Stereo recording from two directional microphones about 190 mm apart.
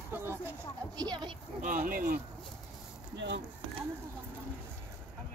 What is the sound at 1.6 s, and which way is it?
Speech, 45° right (ahead or behind).